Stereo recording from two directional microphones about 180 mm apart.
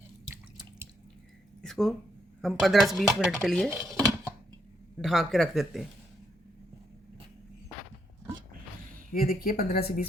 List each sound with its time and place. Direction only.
1.6 s speech: centre (ahead or behind)
4.9 s speech: centre (ahead or behind)
9.1 s speech: 55° left (ahead or behind)